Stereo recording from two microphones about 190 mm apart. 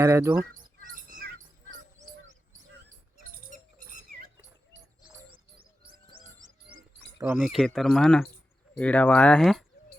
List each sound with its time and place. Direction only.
0.0 s speech: 15° right (ahead or behind)
0.8 s bird: 45° right (ahead or behind)
3.5 s bird: 40° right (ahead or behind)
6.4 s a sound: 20° right (ahead or behind)
7.3 s speech: centre (ahead or behind)